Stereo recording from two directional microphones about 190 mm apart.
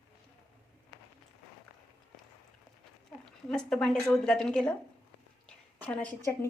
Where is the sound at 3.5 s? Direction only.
5° left (ahead or behind).